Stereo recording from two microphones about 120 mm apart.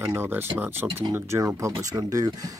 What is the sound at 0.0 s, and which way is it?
Speech, 20° right (ahead or behind).